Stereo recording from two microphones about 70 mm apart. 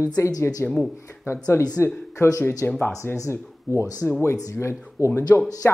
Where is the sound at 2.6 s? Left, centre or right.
Left.